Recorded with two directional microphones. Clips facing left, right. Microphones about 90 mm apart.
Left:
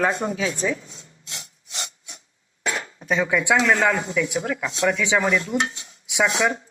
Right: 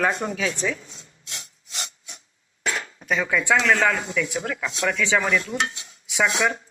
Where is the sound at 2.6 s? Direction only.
20° left (ahead or behind).